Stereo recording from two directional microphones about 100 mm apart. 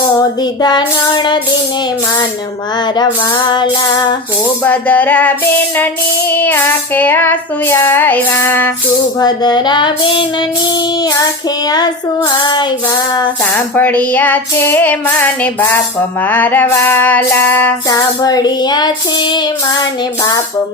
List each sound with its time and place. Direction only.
0.6 s child singing: 45° left (ahead or behind)
4.6 s female singing: 15° left (ahead or behind)
5.7 s child singing: 20° left (ahead or behind)
9.1 s child singing: 45° left (ahead or behind)
12.4 s child singing: 50° left (ahead or behind)
13.4 s female singing: 20° left (ahead or behind)
16.2 s child singing: 20° left (ahead or behind)
17.8 s child singing: 40° left (ahead or behind)